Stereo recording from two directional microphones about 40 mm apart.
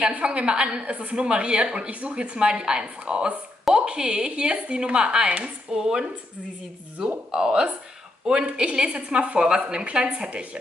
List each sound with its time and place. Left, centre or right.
0.2 s a woman's voice: right
7.2 s a woman's voice: right